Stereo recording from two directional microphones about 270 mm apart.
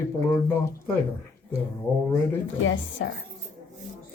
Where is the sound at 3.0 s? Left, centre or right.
Left.